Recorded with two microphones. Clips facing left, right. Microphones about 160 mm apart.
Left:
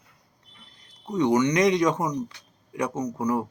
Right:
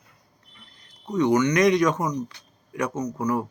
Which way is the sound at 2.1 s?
20° left (ahead or behind).